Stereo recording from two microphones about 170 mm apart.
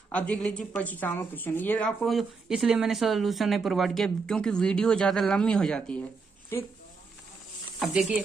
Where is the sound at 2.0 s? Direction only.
Centre (ahead or behind).